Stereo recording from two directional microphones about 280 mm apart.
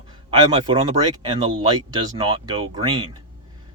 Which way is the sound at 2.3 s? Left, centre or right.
Centre.